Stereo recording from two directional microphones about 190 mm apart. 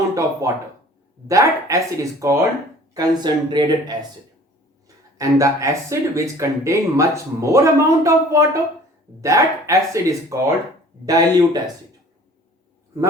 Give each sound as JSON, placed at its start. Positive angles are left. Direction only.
{"t": 0.1, "sound": "speech", "side_deg": -15}
{"t": 5.1, "sound": "speech", "side_deg": -15}